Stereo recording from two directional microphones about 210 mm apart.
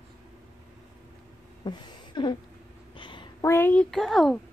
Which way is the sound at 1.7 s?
20° left (ahead or behind).